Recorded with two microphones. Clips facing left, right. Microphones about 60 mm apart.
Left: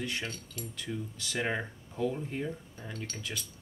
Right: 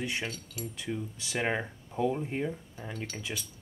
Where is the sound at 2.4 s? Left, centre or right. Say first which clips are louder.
Right 3 dB; centre.